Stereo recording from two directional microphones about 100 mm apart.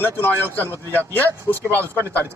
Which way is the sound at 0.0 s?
20° left (ahead or behind).